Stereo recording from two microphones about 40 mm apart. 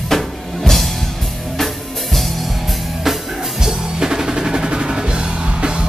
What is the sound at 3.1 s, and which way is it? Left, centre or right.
Music, centre.